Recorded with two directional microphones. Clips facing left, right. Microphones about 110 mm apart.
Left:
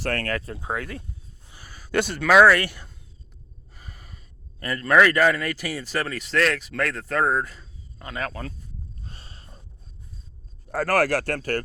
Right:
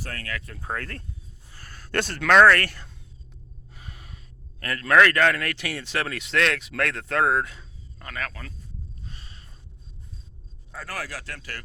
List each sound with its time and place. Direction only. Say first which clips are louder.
0.0 s speech: left 9 dB; 70° left (ahead or behind)
0.7 s speech: left 2 dB; 10° left (ahead or behind)
3.8 s gasp: right 1 dB; centre (ahead or behind)
4.6 s speech: left 1 dB; 5° left (ahead or behind)
7.9 s speech: left 4 dB; 25° left (ahead or behind)
9.0 s a sound: left 1 dB; 35° left (ahead or behind)
10.7 s speech: left 14 dB; 70° left (ahead or behind); by 11.6 s 50° left (ahead or behind)